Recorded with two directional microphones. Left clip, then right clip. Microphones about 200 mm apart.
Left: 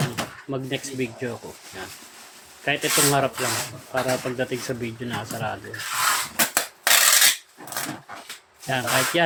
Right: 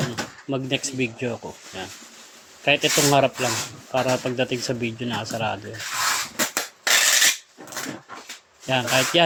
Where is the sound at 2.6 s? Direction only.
30° right (ahead or behind).